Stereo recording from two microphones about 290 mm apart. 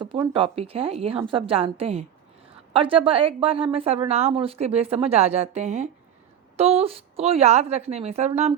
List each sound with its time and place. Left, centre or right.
0.0 s a woman's voice: centre